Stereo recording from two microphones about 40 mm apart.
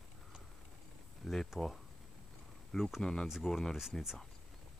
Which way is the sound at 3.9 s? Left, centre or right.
Centre.